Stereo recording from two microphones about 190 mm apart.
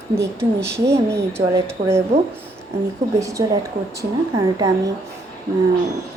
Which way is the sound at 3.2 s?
15° right (ahead or behind).